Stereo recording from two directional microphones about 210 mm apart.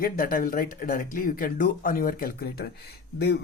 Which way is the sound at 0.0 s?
40° left (ahead or behind).